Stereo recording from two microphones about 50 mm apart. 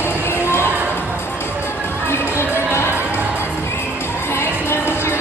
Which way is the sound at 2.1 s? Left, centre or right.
Left.